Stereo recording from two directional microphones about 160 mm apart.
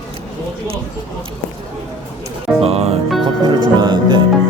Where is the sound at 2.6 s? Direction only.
40° right (ahead or behind).